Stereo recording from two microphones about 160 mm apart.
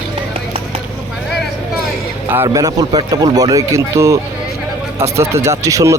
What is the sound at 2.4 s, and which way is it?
Speech, 20° right (ahead or behind).